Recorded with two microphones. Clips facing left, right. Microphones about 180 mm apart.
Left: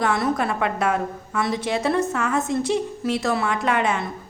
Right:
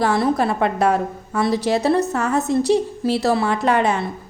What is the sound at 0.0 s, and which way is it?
A woman's voice, 35° right (ahead or behind).